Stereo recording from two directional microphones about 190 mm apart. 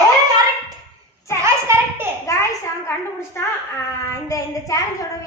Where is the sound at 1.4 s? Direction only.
15° right (ahead or behind).